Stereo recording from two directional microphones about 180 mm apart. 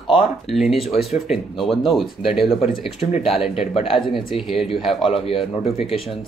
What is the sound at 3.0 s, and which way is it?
Speech, 35° left (ahead or behind).